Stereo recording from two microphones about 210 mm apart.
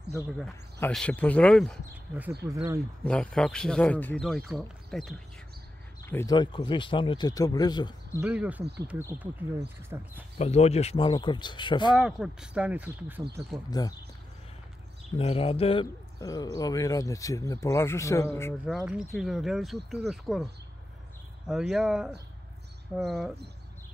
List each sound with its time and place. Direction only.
0.4 s speech: 5° left (ahead or behind)
2.4 s speech: 15° right (ahead or behind)
3.0 s speech: 5° left (ahead or behind)
6.0 s speech: 15° left (ahead or behind)
8.2 s speech: 5° right (ahead or behind)
9.8 s speech: 10° right (ahead or behind)
10.4 s speech: 30° left (ahead or behind)
11.9 s speech: centre (ahead or behind)
13.7 s speech: 20° left (ahead or behind)
15.1 s speech: 25° left (ahead or behind); by 18.5 s 10° left (ahead or behind)
18.7 s speech: centre (ahead or behind)
21.5 s speech: centre (ahead or behind)